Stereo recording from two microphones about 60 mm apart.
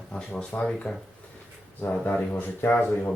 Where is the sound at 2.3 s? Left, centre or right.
Left.